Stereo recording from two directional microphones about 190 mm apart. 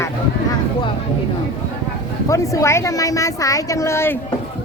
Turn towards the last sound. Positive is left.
turn(degrees=15)  # may be behind; listen again after turning